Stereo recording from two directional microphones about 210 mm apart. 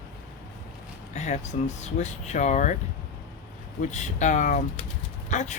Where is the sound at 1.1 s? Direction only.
35° left (ahead or behind).